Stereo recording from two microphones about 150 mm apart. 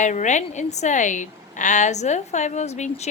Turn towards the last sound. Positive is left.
turn(degrees=50)  # may be behind; listen again after turning